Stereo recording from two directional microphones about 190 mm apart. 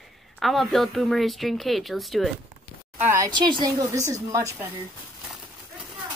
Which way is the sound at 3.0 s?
15° right (ahead or behind).